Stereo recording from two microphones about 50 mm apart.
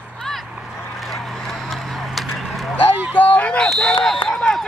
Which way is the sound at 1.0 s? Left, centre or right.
Centre.